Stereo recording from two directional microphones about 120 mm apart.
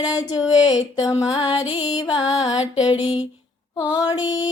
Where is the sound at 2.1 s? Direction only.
35° left (ahead or behind).